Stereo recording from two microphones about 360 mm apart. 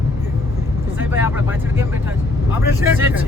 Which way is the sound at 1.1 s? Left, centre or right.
Centre.